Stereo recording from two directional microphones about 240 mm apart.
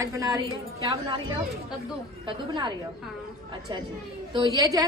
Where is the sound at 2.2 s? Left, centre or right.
Centre.